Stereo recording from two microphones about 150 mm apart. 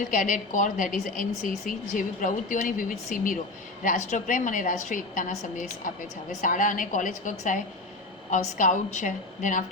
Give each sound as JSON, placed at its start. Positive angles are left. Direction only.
{"t": 0.1, "sound": "a woman's voice", "side_deg": 60}